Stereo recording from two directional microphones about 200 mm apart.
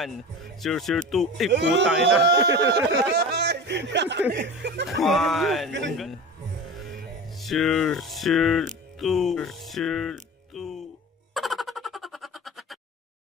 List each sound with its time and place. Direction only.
0.0 s speech: centre (ahead or behind)
1.5 s speech: 60° right (ahead or behind)
5.0 s speech: centre (ahead or behind)
5.7 s speech: 65° right (ahead or behind)
6.7 s music: centre (ahead or behind)
7.3 s speech: centre (ahead or behind)
11.3 s a sound: centre (ahead or behind)